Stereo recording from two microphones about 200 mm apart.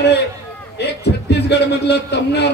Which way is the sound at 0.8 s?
55° left (ahead or behind).